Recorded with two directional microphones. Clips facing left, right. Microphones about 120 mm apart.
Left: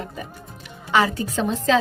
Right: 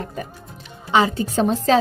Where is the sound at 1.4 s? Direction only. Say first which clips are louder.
Right 2 dB; 40° right (ahead or behind).